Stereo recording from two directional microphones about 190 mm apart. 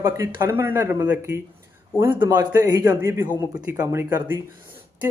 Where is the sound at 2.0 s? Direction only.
25° right (ahead or behind).